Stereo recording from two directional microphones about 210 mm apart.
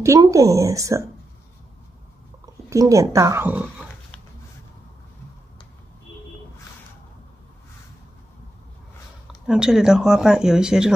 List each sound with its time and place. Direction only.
0.0 s speech: 15° right (ahead or behind)
2.4 s speech: 15° right (ahead or behind)
9.3 s speech: 5° right (ahead or behind)